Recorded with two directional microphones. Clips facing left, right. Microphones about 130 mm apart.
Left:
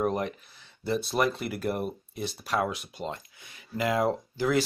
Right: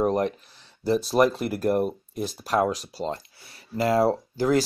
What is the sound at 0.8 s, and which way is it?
Speech, 40° right (ahead or behind).